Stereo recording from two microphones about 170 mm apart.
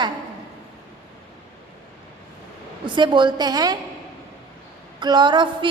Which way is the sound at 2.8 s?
25° right (ahead or behind).